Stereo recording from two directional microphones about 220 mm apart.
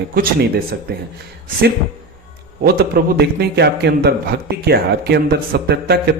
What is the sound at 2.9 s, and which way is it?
A man's voice, 45° right (ahead or behind).